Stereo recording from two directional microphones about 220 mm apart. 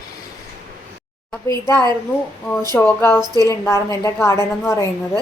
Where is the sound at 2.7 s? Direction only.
10° left (ahead or behind).